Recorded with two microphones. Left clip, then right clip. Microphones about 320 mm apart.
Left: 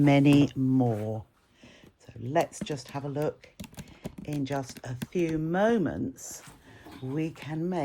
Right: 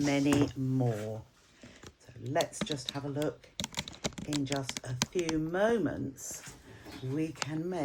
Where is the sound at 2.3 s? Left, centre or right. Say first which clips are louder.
Left 4 dB; left.